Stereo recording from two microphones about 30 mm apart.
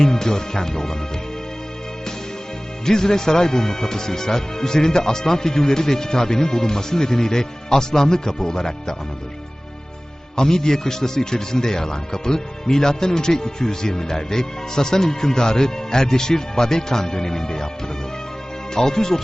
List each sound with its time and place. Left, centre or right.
0.0 s speech: centre
2.8 s speech: centre
10.3 s speech: centre
18.7 s speech: centre